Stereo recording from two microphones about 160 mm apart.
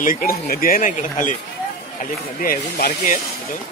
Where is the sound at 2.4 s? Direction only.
65° left (ahead or behind).